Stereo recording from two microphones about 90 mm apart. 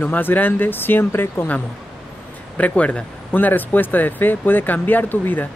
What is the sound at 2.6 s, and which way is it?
Speech, 15° left (ahead or behind).